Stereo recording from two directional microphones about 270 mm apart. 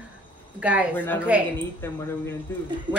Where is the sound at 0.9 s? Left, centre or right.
Centre.